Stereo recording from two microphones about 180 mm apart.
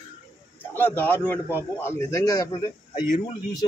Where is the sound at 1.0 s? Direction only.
10° left (ahead or behind).